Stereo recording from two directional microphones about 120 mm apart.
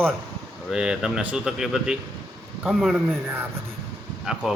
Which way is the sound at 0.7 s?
5° right (ahead or behind).